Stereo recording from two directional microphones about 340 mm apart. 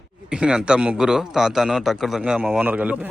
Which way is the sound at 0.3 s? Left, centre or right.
Centre.